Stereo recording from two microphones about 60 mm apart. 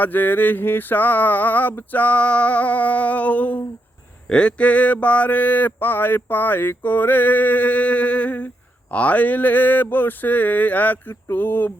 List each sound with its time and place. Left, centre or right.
0.0 s mantra: left